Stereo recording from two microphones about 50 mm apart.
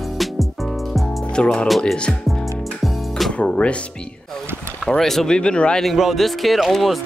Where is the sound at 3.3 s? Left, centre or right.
Left.